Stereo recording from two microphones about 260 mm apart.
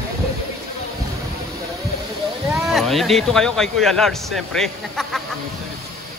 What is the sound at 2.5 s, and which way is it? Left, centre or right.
Speech, centre.